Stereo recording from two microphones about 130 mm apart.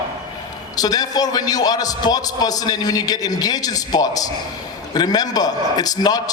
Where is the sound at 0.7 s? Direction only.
30° left (ahead or behind).